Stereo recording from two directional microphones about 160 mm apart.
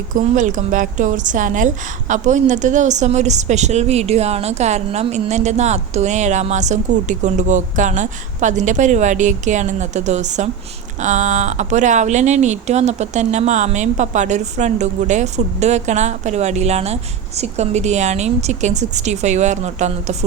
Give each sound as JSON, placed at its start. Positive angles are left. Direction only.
{"t": 0.2, "sound": "a woman's voice", "side_deg": -50}